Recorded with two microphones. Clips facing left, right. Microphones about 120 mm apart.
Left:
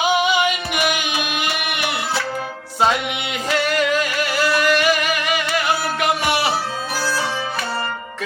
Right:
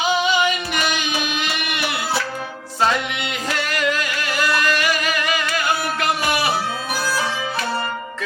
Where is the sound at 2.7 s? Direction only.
10° left (ahead or behind).